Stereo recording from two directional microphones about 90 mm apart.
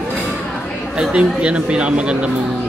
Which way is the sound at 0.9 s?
10° right (ahead or behind).